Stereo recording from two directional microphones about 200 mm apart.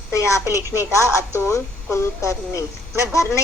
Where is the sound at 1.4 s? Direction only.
15° left (ahead or behind).